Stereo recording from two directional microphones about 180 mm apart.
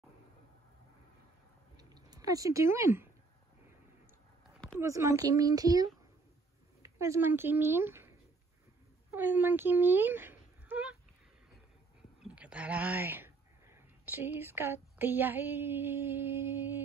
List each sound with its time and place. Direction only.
1.8 s speech: 20° right (ahead or behind)
4.7 s a child's voice: 15° right (ahead or behind)
9.1 s speech: 10° right (ahead or behind)
12.4 s speech: 5° right (ahead or behind)